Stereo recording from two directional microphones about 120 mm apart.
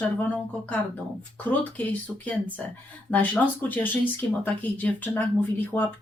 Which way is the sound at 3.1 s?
15° left (ahead or behind).